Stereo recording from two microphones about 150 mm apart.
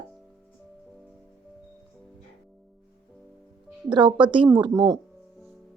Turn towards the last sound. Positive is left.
turn(degrees=-25)  # may be behind; listen again after turning